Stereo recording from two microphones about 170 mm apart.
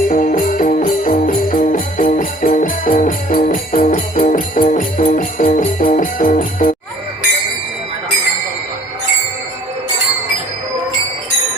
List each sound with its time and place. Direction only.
0.1 s music: 50° left (ahead or behind)